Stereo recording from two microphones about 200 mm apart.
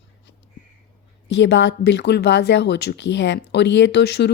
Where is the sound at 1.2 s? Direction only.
65° left (ahead or behind).